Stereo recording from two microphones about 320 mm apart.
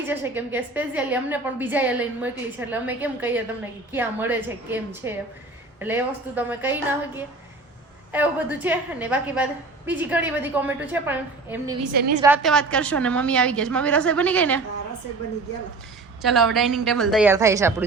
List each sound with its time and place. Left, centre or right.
0.0 s a woman's voice: centre
8.1 s a woman's voice: centre
11.8 s a woman's voice: right
12.2 s a woman's voice: centre
16.2 s a woman's voice: centre